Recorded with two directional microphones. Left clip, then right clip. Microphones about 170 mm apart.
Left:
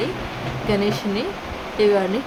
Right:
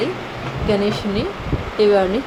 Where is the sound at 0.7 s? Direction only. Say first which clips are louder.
Right 3 dB; 10° right (ahead or behind).